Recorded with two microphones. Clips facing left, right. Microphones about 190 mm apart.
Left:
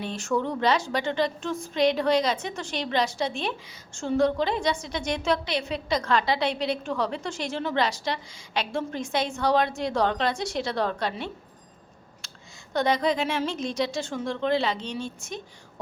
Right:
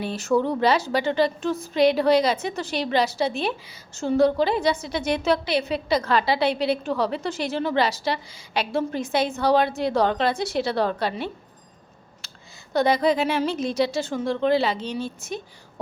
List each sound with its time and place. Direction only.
0.0 s a woman's voice: 5° right (ahead or behind)
12.2 s a sound: centre (ahead or behind)
12.7 s a woman's voice: 5° right (ahead or behind)